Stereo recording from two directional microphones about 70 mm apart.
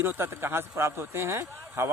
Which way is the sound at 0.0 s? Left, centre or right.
Right.